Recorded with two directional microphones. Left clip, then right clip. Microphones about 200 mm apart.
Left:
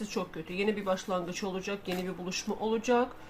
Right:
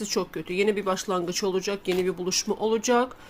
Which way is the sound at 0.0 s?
40° right (ahead or behind).